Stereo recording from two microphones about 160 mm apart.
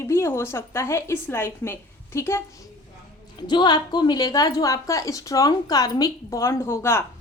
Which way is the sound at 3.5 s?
30° left (ahead or behind).